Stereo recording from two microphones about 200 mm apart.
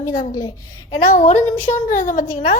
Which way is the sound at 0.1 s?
45° left (ahead or behind).